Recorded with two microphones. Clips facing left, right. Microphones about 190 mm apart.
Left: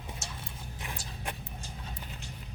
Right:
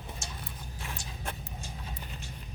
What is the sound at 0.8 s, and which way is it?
Horse, 15° left (ahead or behind).